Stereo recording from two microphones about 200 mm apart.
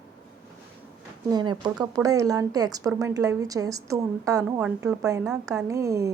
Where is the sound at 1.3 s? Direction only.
20° right (ahead or behind).